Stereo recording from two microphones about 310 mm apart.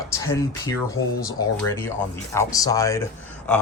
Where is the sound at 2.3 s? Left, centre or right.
Centre.